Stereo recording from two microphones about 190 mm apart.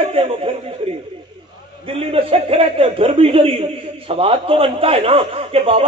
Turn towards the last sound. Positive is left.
turn(degrees=-30)  # may be behind; listen again after turning